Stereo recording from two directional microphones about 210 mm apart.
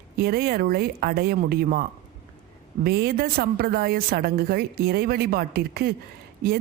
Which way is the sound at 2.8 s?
45° right (ahead or behind).